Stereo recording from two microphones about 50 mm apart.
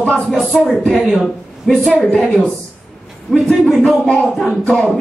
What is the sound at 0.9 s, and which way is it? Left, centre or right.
Speech, centre.